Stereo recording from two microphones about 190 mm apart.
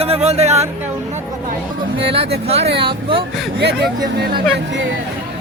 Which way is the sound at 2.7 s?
30° right (ahead or behind).